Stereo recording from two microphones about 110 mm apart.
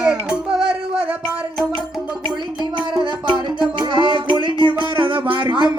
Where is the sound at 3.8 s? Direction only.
45° right (ahead or behind).